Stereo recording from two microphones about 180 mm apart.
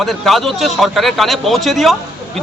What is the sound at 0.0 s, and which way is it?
Speech, centre (ahead or behind).